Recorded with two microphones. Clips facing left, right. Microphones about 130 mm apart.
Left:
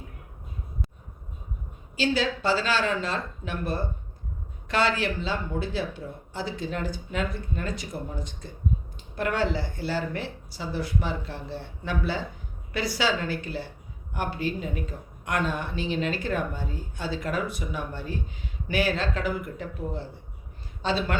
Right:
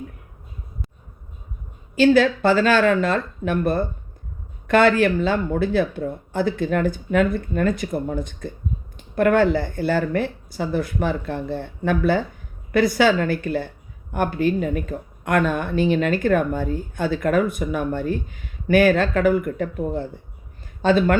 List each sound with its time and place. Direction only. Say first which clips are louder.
2.0 s speech: right 10 dB; 55° right (ahead or behind)